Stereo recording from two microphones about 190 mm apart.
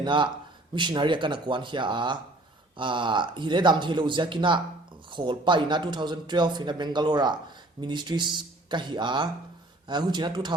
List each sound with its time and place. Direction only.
0.0 s speech: 25° right (ahead or behind)